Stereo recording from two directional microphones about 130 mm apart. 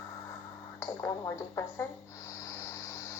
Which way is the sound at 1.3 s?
20° left (ahead or behind).